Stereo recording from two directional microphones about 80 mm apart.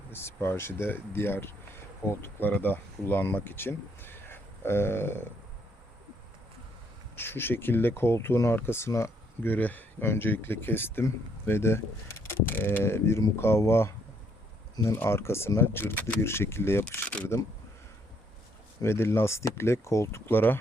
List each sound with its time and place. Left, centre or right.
0.1 s speech: left
7.2 s speech: left
9.4 s speech: left
14.9 s speech: left
18.8 s speech: left